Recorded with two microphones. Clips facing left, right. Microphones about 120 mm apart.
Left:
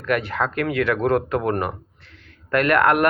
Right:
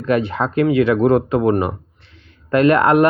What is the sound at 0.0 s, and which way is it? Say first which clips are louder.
Speech: right 4 dB; 25° right (ahead or behind).